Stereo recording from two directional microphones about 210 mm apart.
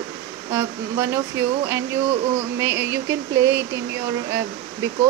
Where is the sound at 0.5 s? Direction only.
15° right (ahead or behind).